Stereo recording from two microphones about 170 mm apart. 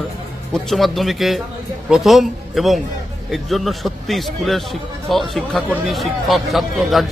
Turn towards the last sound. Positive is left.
turn(degrees=0)  # may be behind; listen again after turning